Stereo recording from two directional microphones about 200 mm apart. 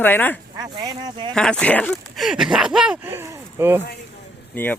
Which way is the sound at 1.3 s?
5° left (ahead or behind).